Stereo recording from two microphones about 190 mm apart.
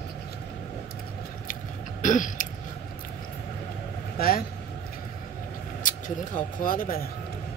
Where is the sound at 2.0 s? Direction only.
40° left (ahead or behind).